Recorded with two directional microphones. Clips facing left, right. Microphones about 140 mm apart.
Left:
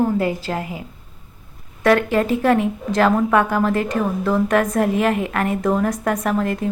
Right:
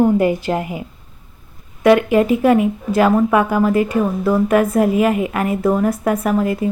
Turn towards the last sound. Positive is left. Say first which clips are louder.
# right 3 dB
turn(degrees=-5)  # may be behind; listen again after turning